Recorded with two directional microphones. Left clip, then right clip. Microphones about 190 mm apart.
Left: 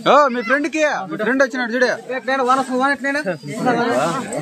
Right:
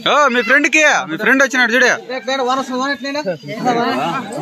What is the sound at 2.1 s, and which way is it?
A man's voice, 35° right (ahead or behind).